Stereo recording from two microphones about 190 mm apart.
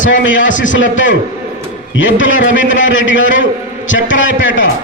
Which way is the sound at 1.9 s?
80° left.